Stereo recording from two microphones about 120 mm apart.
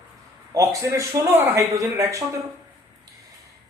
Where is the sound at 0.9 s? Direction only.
25° right (ahead or behind).